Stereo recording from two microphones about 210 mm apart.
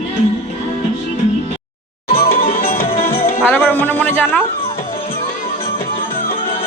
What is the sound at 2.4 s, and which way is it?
Music, 45° left (ahead or behind).